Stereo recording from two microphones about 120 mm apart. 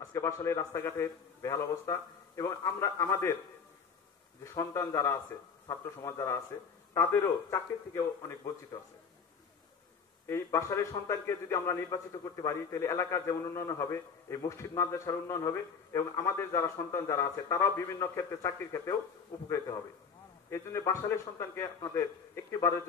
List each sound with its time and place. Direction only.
0.1 s a man's voice: 25° left (ahead or behind)
4.4 s a man's voice: 25° left (ahead or behind)
10.2 s a man's voice: 20° left (ahead or behind)
20.4 s a man's voice: 25° left (ahead or behind)